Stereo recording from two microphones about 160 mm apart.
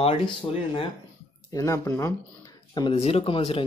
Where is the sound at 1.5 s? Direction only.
20° left (ahead or behind).